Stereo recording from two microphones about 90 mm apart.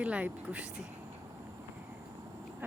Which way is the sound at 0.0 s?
15° right (ahead or behind).